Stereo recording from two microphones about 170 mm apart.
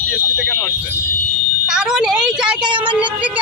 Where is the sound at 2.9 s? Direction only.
10° right (ahead or behind).